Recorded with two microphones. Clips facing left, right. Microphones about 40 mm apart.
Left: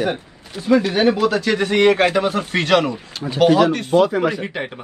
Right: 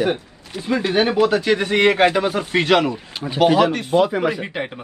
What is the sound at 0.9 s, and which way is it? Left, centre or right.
Speech, right.